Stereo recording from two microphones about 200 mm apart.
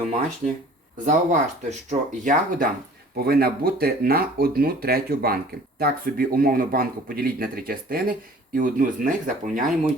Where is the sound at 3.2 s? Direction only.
50° right (ahead or behind).